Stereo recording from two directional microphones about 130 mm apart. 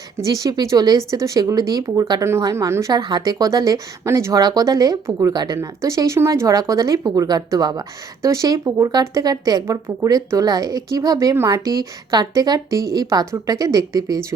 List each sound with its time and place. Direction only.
0.3 s speech: 30° right (ahead or behind)
2.9 s speech: 35° right (ahead or behind)